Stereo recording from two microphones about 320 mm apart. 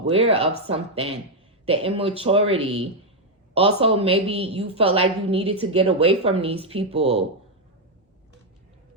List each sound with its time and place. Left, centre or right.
0.2 s a woman's voice: centre